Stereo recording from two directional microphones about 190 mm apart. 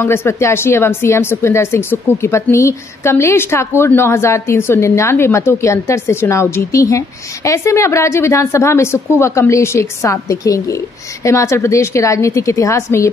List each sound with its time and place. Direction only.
0.0 s speech: 10° left (ahead or behind)